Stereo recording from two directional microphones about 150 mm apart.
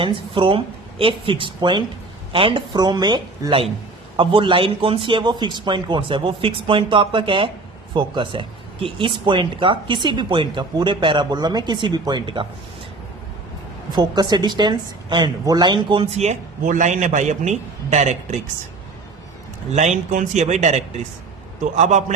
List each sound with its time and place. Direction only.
0.0 s speech: 35° right (ahead or behind)
13.9 s a woman's voice: 25° right (ahead or behind)
16.1 s a man's voice: 50° right (ahead or behind)
19.7 s a man's voice: 50° right (ahead or behind)